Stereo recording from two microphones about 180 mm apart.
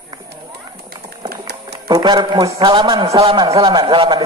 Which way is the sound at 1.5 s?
65° right (ahead or behind).